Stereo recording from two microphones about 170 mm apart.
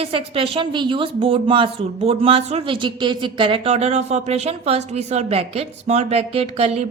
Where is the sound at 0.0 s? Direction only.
35° right (ahead or behind).